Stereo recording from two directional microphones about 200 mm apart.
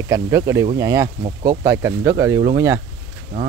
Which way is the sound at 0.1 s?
15° right (ahead or behind).